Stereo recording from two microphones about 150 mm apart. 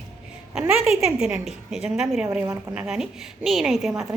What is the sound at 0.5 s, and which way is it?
A woman's voice, 5° right (ahead or behind).